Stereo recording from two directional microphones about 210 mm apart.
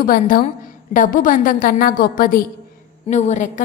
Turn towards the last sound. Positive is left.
turn(degrees=35)  # may be behind; listen again after turning